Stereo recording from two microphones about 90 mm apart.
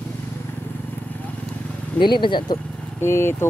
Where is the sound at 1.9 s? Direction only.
60° left (ahead or behind).